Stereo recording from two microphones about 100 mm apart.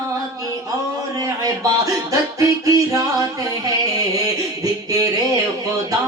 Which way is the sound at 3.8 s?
35° right (ahead or behind).